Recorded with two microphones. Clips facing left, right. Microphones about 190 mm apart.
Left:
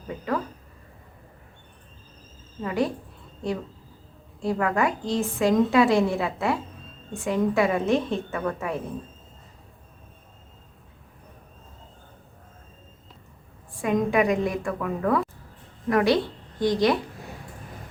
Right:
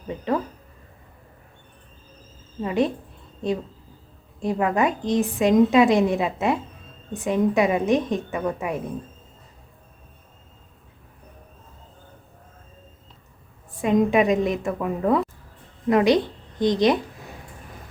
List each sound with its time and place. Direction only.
2.6 s a woman's voice: 20° right (ahead or behind)
13.8 s a woman's voice: 20° right (ahead or behind)